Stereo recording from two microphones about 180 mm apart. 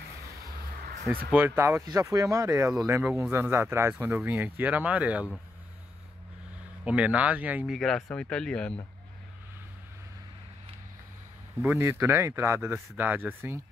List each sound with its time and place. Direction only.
1.3 s speech: 10° right (ahead or behind)
6.8 s speech: 5° right (ahead or behind)
11.7 s speech: 15° right (ahead or behind)